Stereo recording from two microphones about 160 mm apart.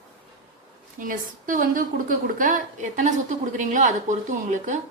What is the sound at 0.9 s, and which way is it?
A woman's voice, 55° right (ahead or behind).